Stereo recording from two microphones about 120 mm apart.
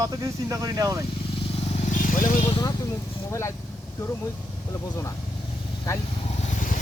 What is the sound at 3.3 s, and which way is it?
Speech, 25° left (ahead or behind).